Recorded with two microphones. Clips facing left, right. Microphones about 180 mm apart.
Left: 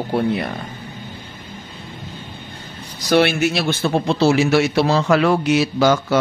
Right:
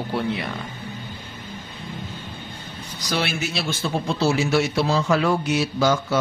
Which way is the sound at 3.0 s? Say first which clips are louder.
Left 10 dB; 65° left (ahead or behind).